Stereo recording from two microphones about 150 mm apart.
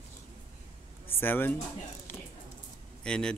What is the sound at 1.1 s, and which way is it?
Speech, 15° left (ahead or behind).